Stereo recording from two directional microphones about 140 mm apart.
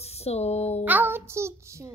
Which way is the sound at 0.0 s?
50° left (ahead or behind).